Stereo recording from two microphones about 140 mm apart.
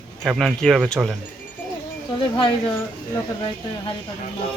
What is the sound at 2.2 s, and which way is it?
Speech, 35° left (ahead or behind).